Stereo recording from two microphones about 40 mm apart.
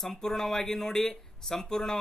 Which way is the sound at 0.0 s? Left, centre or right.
Centre.